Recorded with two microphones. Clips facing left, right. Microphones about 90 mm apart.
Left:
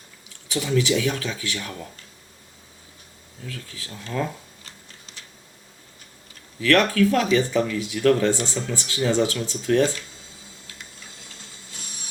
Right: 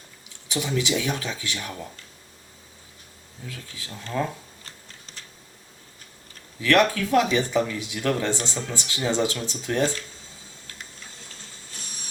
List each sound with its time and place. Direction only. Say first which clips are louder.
0.4 s speech: left 4 dB; 20° right (ahead or behind)
3.5 s speech: left 2 dB; 20° right (ahead or behind)
4.6 s a sound: even; 40° right (ahead or behind)
6.6 s speech: left 2 dB; 20° right (ahead or behind)